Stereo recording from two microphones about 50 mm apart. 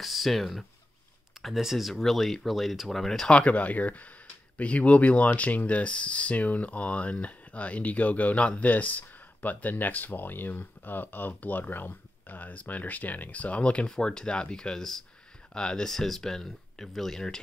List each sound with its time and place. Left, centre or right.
0.0 s speech: centre
3.3 s speech: left